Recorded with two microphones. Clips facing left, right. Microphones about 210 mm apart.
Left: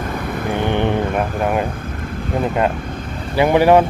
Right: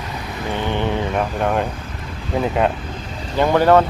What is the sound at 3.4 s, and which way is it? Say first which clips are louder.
Speech: left 2 dB; 15° left (ahead or behind).